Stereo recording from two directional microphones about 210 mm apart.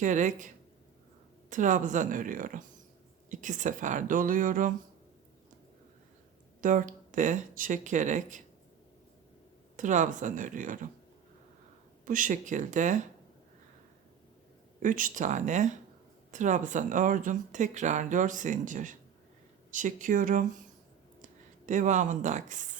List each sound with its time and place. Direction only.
0.0 s speech: 35° right (ahead or behind)
6.6 s speech: 40° right (ahead or behind)
9.7 s speech: 35° right (ahead or behind)
12.0 s speech: 40° right (ahead or behind)
14.8 s speech: 40° right (ahead or behind)
21.7 s speech: 35° right (ahead or behind)